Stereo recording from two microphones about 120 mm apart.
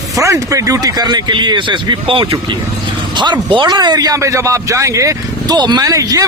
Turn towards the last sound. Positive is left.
turn(degrees=-30)  # may be behind; listen again after turning